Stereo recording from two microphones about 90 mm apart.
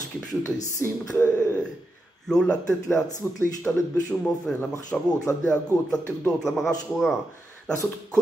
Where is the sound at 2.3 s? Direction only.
10° left (ahead or behind).